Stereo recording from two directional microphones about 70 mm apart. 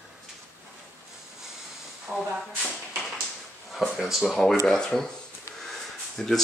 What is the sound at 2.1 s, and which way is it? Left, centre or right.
Hiss, centre.